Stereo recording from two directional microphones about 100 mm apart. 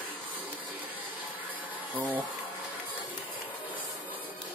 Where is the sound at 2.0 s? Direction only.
15° right (ahead or behind).